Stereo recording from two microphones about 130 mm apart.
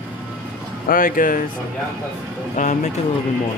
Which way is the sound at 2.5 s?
70° left (ahead or behind).